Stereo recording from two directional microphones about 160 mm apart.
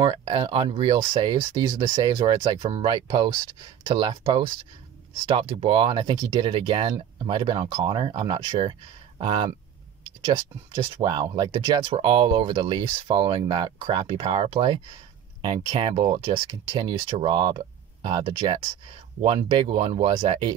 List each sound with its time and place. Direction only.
0.0 s speech: 30° right (ahead or behind)